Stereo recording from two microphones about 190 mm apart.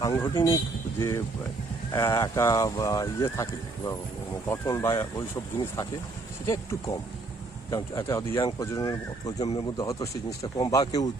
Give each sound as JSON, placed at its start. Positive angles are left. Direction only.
{"t": 0.0, "sound": "speech", "side_deg": 15}